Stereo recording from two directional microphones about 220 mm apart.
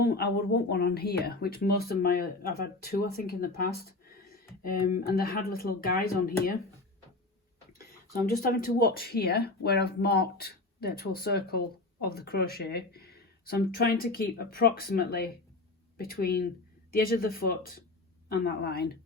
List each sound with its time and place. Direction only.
0.0 s speech: 45° left (ahead or behind)
8.4 s speech: 45° left (ahead or behind)